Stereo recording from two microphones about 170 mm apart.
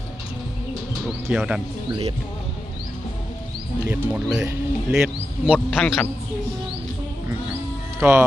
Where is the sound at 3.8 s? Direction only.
10° right (ahead or behind).